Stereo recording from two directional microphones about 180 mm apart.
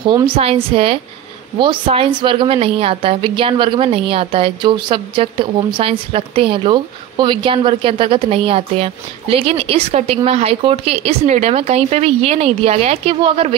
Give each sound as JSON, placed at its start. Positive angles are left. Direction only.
{"t": 0.0, "sound": "a woman's voice", "side_deg": -25}